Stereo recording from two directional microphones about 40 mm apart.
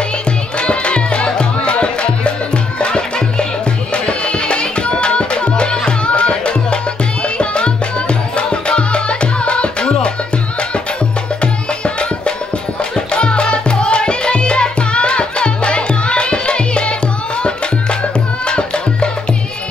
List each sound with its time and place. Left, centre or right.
0.6 s music: left
11.4 s music: left
18.5 s music: left